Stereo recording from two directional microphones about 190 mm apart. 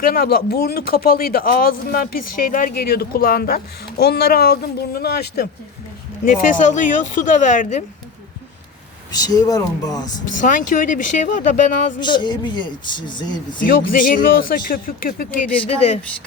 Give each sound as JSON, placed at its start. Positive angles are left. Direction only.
{"t": 0.0, "sound": "a man's voice", "side_deg": 50}
{"t": 6.2, "sound": "a man's voice", "side_deg": 45}
{"t": 9.2, "sound": "speech", "side_deg": 20}
{"t": 10.4, "sound": "a man's voice", "side_deg": 45}
{"t": 11.9, "sound": "speech", "side_deg": 25}
{"t": 13.6, "sound": "a man's voice", "side_deg": 45}
{"t": 15.5, "sound": "a woman's voice", "side_deg": 30}